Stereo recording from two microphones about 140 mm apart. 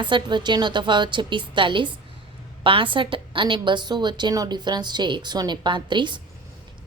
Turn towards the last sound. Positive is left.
turn(degrees=-35)  # may be behind; listen again after turning